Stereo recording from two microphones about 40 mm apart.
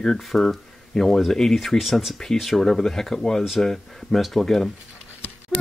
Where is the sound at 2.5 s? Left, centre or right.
Centre.